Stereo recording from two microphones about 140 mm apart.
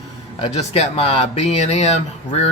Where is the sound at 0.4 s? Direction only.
45° left (ahead or behind).